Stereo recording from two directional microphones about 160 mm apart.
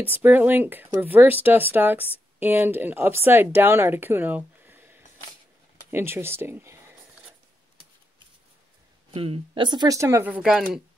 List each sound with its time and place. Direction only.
0.0 s speech: 10° right (ahead or behind)
9.1 s speech: 35° right (ahead or behind); by 10.8 s 5° right (ahead or behind)